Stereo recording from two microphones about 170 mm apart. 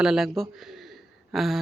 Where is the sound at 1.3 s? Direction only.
Centre (ahead or behind).